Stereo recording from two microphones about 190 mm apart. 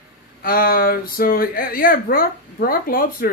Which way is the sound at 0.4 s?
50° left (ahead or behind).